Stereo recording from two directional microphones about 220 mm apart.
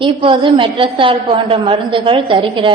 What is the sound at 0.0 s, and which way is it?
A woman's voice, 25° right (ahead or behind).